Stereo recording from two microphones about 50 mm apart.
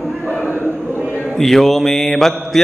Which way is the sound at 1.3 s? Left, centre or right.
Centre.